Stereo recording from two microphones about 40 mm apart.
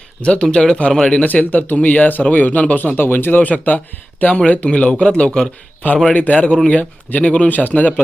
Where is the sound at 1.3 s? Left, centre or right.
Left.